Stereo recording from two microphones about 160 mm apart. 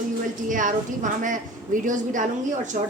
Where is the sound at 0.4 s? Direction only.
55° right (ahead or behind).